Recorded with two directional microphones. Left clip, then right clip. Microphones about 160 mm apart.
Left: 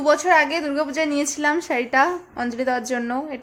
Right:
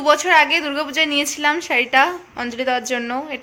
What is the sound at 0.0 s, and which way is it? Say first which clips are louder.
A woman's voice: right 3 dB; 25° left (ahead or behind).